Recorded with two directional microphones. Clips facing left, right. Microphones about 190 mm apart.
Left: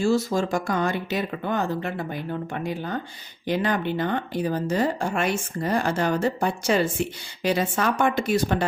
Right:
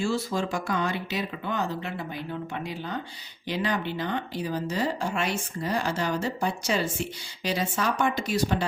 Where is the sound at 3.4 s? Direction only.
50° left (ahead or behind).